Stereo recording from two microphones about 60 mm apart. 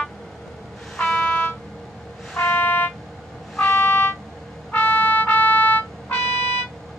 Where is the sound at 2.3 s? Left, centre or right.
Left.